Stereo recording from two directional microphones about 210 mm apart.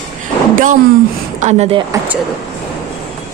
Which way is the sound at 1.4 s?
30° right (ahead or behind).